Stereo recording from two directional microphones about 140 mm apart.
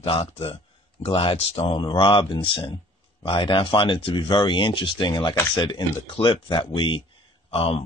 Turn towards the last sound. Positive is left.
turn(degrees=45)  # may be behind; listen again after turning